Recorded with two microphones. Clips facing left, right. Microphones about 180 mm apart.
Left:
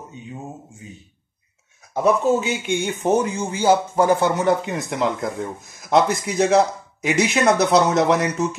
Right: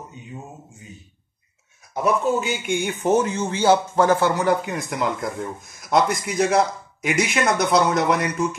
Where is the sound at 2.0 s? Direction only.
25° left (ahead or behind).